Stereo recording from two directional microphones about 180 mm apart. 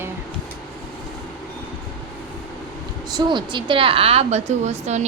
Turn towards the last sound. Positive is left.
turn(degrees=-40)  # may be behind; listen again after turning